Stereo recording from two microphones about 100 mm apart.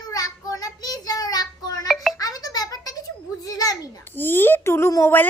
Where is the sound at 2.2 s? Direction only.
40° left (ahead or behind).